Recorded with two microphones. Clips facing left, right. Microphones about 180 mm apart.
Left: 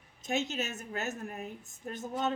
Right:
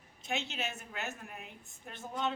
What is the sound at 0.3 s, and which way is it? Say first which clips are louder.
A woman's voice: left 5 dB; 40° left (ahead or behind).